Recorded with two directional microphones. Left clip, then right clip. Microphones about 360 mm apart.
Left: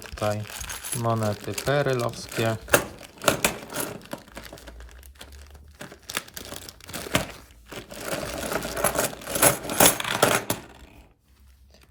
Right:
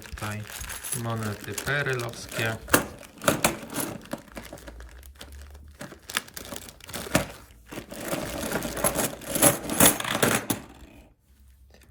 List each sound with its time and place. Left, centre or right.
0.0 s crumpling: centre
5.8 s tearing: centre